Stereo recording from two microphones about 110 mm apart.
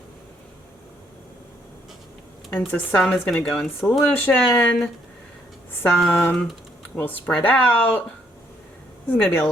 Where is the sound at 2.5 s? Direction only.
15° left (ahead or behind).